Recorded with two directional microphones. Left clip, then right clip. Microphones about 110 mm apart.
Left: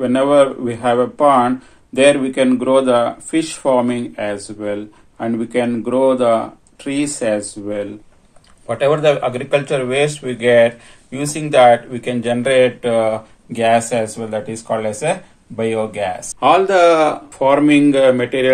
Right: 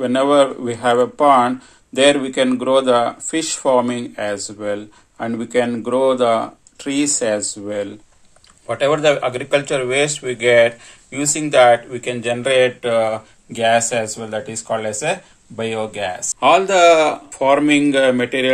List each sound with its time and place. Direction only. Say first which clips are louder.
0.0 s speech: left 2 dB; 35° right (ahead or behind); by 7.9 s 50° right (ahead or behind)
8.6 s speech: left 1 dB; 30° right (ahead or behind)